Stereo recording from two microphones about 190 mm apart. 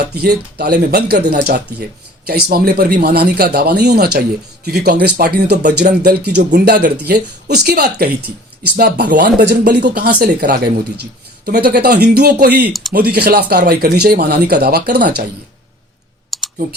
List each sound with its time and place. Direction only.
0.1 s speech: 55° right (ahead or behind)
9.4 s speech: 65° right (ahead or behind)
12.6 s speech: centre (ahead or behind)
12.9 s speech: 55° right (ahead or behind)
16.3 s clicking: centre (ahead or behind)